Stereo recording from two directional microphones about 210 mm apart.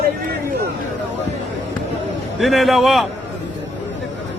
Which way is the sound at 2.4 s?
Centre (ahead or behind).